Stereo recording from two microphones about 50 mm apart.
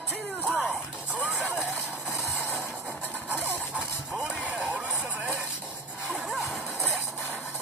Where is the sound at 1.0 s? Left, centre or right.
Right.